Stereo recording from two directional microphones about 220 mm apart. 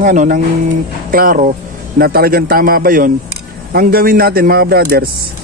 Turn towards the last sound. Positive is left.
turn(degrees=-40)  # may be behind; listen again after turning